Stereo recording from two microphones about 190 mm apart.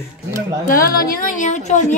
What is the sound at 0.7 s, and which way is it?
A woman's voice, 50° left (ahead or behind).